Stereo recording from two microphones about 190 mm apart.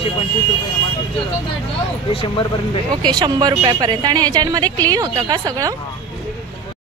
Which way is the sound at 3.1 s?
20° right (ahead or behind).